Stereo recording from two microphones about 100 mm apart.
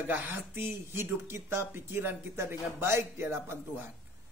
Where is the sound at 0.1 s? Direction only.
20° right (ahead or behind).